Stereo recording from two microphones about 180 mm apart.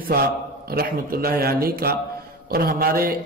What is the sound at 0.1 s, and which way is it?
A man's voice, 55° right (ahead or behind).